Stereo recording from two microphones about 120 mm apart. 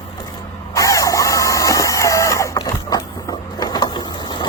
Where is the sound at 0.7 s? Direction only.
25° left (ahead or behind).